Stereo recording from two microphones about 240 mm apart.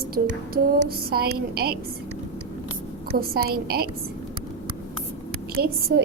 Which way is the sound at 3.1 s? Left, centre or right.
Right.